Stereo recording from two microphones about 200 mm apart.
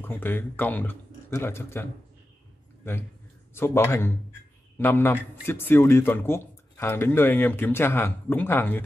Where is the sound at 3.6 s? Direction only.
10° left (ahead or behind).